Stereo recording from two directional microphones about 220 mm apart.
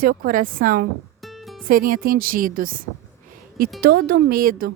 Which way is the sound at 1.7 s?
40° right (ahead or behind).